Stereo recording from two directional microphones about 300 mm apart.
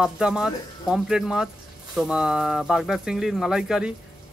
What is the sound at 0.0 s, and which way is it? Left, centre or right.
Speech, centre.